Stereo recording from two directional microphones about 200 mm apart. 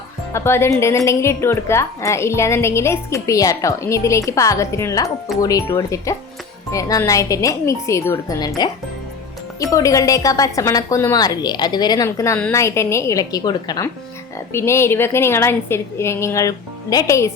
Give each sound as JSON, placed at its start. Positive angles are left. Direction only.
{"t": 0.3, "sound": "a woman's voice", "side_deg": 10}